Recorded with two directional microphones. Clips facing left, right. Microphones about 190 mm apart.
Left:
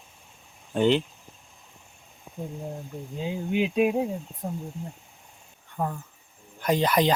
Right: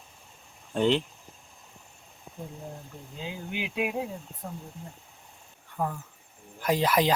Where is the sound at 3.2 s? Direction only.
25° left (ahead or behind).